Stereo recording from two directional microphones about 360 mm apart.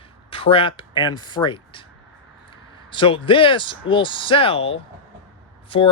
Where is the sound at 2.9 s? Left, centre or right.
Centre.